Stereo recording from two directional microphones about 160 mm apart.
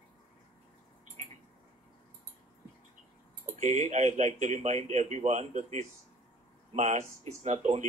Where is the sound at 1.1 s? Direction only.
45° right (ahead or behind).